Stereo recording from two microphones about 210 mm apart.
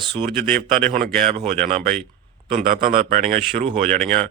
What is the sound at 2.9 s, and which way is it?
Speech, 25° right (ahead or behind).